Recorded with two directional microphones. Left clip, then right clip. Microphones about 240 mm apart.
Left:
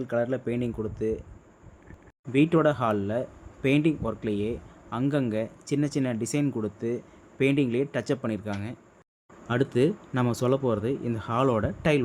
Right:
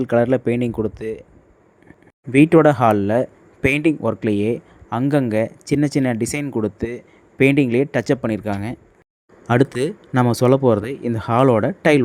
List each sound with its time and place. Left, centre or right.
0.0 s speech: right
2.3 s speech: right